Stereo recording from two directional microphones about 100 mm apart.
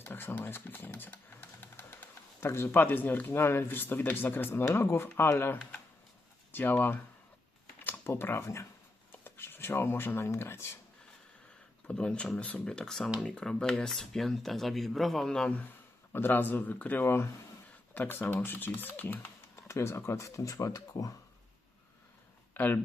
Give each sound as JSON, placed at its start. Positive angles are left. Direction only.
{"t": 0.0, "sound": "speech", "side_deg": 20}
{"t": 11.9, "sound": "speech", "side_deg": 10}
{"t": 16.1, "sound": "speech", "side_deg": 20}
{"t": 19.5, "sound": "speech", "side_deg": 30}
{"t": 22.5, "sound": "speech", "side_deg": 20}